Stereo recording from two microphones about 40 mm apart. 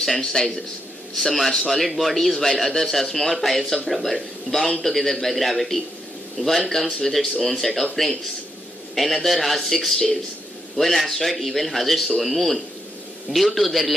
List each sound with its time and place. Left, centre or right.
0.0 s a man's voice: centre
7.0 s speech: centre